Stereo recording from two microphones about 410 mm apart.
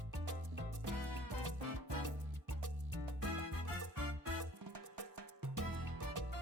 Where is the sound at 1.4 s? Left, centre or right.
Right.